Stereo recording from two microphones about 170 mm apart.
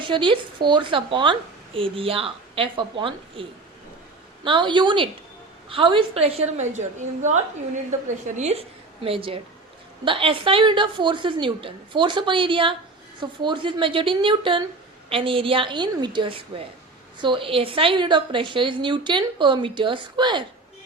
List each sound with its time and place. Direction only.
0.0 s a woman's voice: 30° right (ahead or behind)
4.4 s a woman's voice: 30° right (ahead or behind)